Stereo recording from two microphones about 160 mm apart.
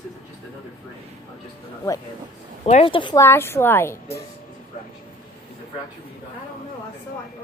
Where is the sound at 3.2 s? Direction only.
15° left (ahead or behind).